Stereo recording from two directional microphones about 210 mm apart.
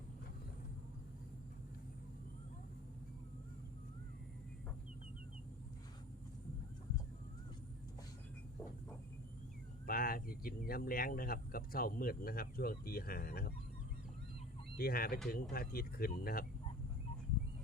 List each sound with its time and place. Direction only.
9.8 s speech: 45° left (ahead or behind)
14.8 s speech: 45° left (ahead or behind)